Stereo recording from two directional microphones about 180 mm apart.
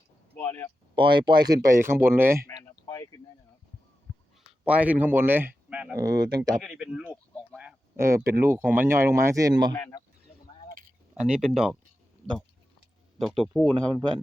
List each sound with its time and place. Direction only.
0.3 s speech: 10° left (ahead or behind)
0.9 s speech: 25° right (ahead or behind)
2.5 s a sound: 20° left (ahead or behind)
4.6 s speech: 5° right (ahead or behind)
6.0 s speech: 20° right (ahead or behind)
6.6 s speech: 5° right (ahead or behind); by 9.7 s 20° right (ahead or behind)
9.7 s speech: 15° left (ahead or behind)
11.1 s speech: 5° right (ahead or behind)
13.4 s speech: 5° left (ahead or behind)